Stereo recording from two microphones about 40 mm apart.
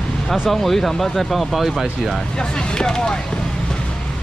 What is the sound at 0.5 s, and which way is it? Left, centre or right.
Speech, centre.